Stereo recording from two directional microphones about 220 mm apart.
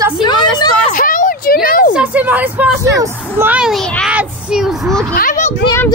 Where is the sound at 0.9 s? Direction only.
35° left (ahead or behind).